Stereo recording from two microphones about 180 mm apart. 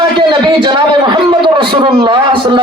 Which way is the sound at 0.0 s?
25° right (ahead or behind).